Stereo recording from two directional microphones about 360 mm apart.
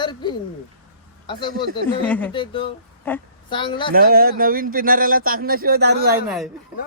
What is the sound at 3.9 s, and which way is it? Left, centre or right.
Speech, right.